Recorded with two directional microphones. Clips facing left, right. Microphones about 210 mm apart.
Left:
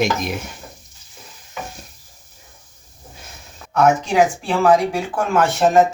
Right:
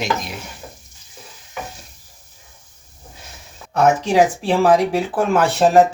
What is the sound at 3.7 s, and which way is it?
Speech, 35° right (ahead or behind).